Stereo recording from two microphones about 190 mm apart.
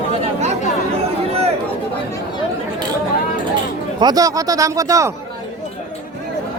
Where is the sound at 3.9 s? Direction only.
20° right (ahead or behind).